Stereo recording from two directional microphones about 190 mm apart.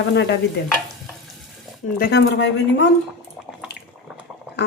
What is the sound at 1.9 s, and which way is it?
Speech, 55° left (ahead or behind).